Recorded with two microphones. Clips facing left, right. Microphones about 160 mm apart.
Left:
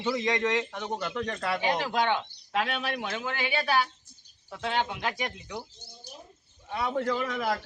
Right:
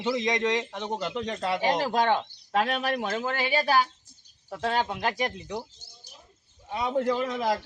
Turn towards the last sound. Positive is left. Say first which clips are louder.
# right 3 dB
turn(degrees=-20)  # may be behind; listen again after turning